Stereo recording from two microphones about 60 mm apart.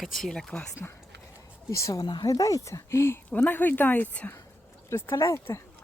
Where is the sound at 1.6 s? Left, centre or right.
Left.